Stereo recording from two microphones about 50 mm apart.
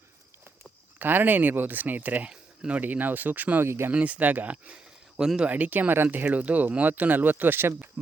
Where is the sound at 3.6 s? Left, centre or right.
Right.